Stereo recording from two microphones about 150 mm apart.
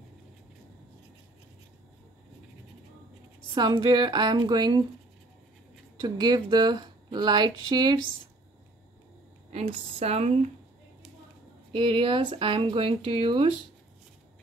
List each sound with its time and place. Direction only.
3.5 s speech: 30° right (ahead or behind)
6.0 s speech: 30° right (ahead or behind)
9.5 s speech: 45° right (ahead or behind)
11.7 s speech: 35° right (ahead or behind)